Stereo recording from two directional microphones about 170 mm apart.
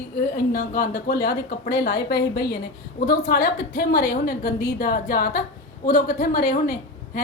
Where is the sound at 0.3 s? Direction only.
55° left (ahead or behind); by 2.6 s 70° left (ahead or behind).